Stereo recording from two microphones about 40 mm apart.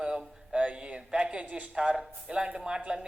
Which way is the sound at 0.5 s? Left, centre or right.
Right.